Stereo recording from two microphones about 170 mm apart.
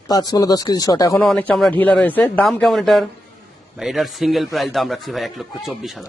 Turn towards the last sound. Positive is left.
turn(degrees=0)  # may be behind; listen again after turning